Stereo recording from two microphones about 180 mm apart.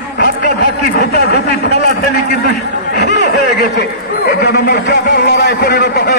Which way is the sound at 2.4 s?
65° left (ahead or behind).